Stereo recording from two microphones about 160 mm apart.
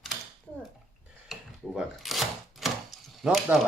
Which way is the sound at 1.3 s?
Centre (ahead or behind).